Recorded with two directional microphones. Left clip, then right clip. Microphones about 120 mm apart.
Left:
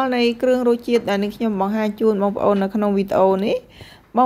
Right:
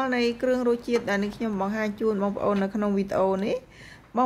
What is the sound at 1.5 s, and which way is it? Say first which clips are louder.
Speech: left 7 dB; 20° left (ahead or behind).